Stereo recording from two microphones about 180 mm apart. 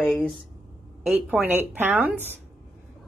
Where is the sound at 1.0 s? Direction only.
5° right (ahead or behind).